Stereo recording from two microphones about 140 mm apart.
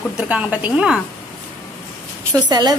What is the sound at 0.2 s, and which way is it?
Speech, 10° right (ahead or behind).